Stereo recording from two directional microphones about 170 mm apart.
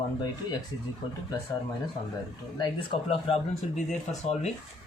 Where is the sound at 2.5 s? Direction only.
25° left (ahead or behind); by 4.5 s 45° left (ahead or behind).